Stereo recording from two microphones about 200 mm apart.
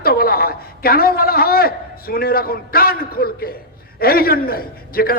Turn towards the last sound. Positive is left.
turn(degrees=50)  # may be behind; listen again after turning